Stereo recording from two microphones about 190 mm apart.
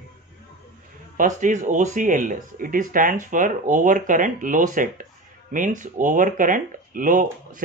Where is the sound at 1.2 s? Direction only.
40° right (ahead or behind).